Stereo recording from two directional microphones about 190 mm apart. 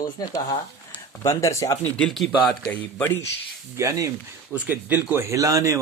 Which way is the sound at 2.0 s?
Centre (ahead or behind).